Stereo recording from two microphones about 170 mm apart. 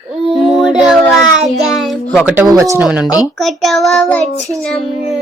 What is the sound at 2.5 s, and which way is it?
Speech, 15° right (ahead or behind).